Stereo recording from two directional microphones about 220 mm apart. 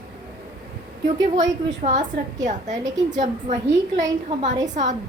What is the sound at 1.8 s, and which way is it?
A woman's voice, 35° right (ahead or behind).